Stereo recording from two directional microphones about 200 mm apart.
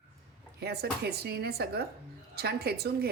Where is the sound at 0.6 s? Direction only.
55° right (ahead or behind).